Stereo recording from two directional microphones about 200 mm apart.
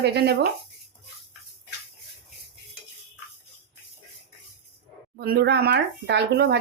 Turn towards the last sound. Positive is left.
turn(degrees=-55)  # may be behind; listen again after turning